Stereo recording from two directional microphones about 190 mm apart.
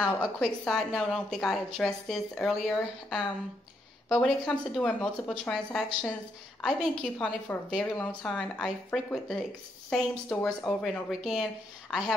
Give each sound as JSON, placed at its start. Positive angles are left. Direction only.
{"t": 0.0, "sound": "a woman's voice", "side_deg": 0}